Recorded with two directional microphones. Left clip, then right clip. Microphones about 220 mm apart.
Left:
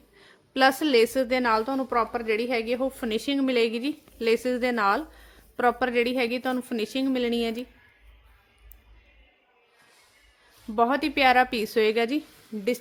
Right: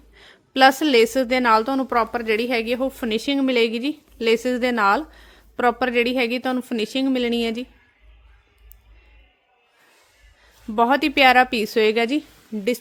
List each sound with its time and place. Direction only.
0.2 s a woman's voice: 30° right (ahead or behind)
10.8 s a woman's voice: 30° right (ahead or behind)
12.5 s a woman's voice: 40° right (ahead or behind)